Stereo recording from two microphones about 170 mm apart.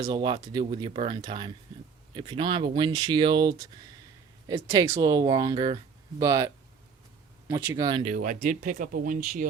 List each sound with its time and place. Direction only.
0.1 s speech: 25° right (ahead or behind)
7.9 s speech: 30° right (ahead or behind)
8.1 s speech: 50° right (ahead or behind)